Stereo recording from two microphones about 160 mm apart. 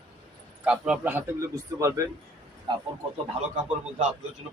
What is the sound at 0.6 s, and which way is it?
Speech, 10° right (ahead or behind).